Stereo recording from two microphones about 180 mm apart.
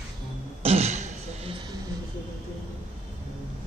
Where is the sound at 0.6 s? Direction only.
35° right (ahead or behind).